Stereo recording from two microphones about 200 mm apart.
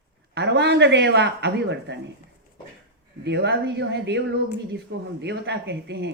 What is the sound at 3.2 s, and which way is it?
Speech, 60° right (ahead or behind).